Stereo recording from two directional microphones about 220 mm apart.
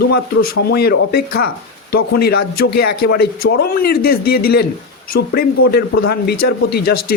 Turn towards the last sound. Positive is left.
turn(degrees=45)  # may be behind; listen again after turning